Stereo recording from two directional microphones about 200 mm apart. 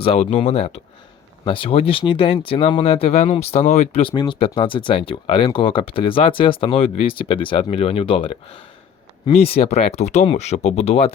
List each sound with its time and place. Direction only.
0.0 s speech: 35° left (ahead or behind)